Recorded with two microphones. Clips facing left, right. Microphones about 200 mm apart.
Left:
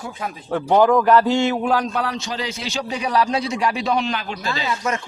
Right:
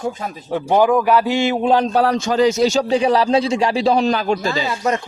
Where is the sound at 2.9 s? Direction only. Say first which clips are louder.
Right 6 dB; 30° right (ahead or behind).